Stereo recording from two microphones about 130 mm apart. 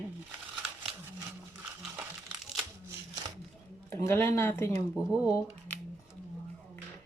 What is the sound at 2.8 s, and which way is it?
Shuffling cards, 25° right (ahead or behind).